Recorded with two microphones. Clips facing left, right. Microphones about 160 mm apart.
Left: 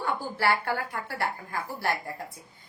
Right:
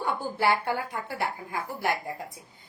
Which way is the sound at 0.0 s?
20° right (ahead or behind).